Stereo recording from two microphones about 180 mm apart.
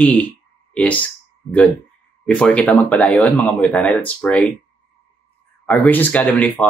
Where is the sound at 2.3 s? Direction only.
5° left (ahead or behind).